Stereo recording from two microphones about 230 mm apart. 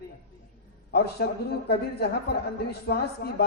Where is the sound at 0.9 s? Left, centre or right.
Left.